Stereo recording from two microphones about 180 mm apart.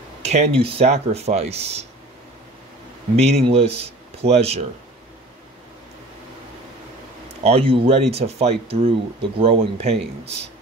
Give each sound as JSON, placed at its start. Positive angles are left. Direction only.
{"t": 0.2, "sound": "speech", "side_deg": -35}
{"t": 3.2, "sound": "speech", "side_deg": -35}
{"t": 7.4, "sound": "speech", "side_deg": -30}
{"t": 10.2, "sound": "speech", "side_deg": -70}